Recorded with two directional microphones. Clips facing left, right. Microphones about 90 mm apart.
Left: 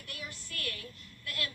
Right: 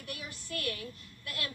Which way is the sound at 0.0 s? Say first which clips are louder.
Right 2 dB; 20° right (ahead or behind).